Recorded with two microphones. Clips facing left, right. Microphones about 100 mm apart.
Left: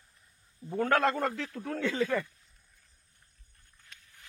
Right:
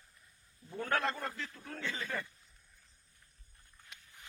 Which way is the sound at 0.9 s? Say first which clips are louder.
Left 7 dB; 85° left.